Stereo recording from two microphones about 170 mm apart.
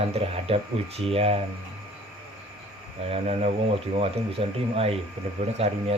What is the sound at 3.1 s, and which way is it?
Speech, 40° right (ahead or behind).